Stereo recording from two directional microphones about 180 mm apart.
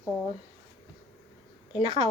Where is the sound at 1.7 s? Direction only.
25° left (ahead or behind).